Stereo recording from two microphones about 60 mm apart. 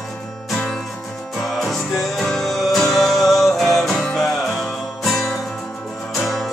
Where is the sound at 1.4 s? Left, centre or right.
Centre.